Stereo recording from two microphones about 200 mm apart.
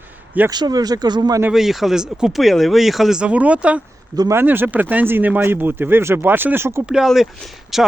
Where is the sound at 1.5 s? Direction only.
Centre (ahead or behind).